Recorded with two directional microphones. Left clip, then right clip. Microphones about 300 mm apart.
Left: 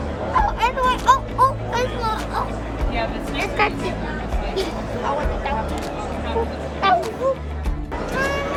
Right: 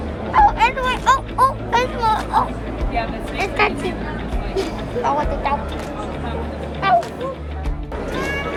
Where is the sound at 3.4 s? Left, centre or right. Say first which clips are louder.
Right 2 dB; right.